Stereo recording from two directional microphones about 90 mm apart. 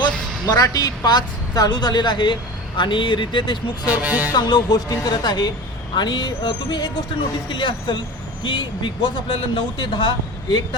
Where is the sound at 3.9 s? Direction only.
20° right (ahead or behind).